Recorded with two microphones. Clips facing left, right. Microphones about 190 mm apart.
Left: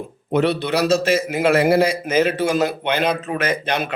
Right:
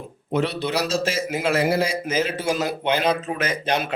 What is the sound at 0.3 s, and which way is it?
Speech, 60° left (ahead or behind).